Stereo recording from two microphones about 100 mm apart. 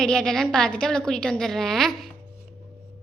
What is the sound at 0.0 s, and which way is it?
A child's voice, 5° left (ahead or behind).